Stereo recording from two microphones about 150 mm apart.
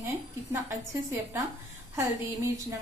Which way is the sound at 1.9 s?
20° right (ahead or behind).